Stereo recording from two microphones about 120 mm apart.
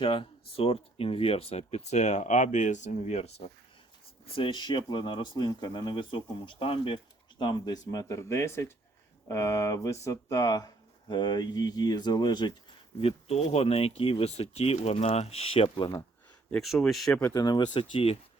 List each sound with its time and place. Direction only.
0.0 s speech: 45° left (ahead or behind)
4.4 s speech: 45° left (ahead or behind)
13.0 s speech: 55° left (ahead or behind)
16.5 s speech: centre (ahead or behind)
17.3 s speech: 35° left (ahead or behind)